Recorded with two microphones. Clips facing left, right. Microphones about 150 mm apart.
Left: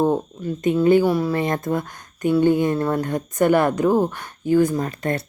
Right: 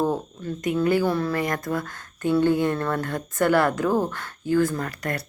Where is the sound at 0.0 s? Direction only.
20° left (ahead or behind).